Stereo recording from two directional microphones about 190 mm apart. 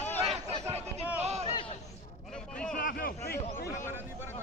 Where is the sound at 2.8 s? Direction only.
50° left (ahead or behind).